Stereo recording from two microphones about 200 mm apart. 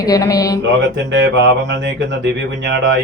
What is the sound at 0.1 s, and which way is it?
Music, 15° left (ahead or behind).